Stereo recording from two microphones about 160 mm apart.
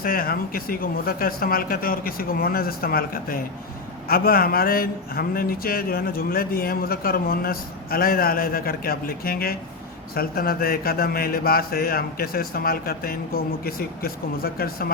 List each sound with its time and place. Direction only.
0.0 s speech: 65° left (ahead or behind)